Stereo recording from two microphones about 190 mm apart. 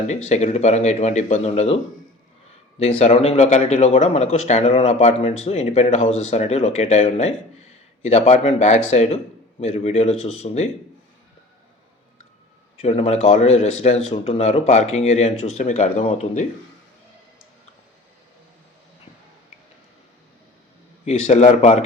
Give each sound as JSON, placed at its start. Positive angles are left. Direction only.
{"t": 0.1, "sound": "a man's voice", "side_deg": 35}
{"t": 12.8, "sound": "a man's voice", "side_deg": 30}
{"t": 21.0, "sound": "a man's voice", "side_deg": 35}